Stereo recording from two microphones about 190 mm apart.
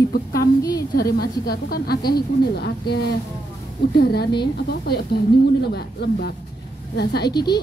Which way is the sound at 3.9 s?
55° left (ahead or behind).